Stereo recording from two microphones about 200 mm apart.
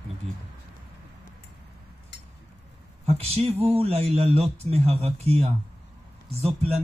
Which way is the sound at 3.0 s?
30° right (ahead or behind).